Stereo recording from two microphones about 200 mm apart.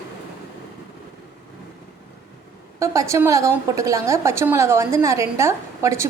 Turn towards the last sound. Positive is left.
turn(degrees=-15)  # may be behind; listen again after turning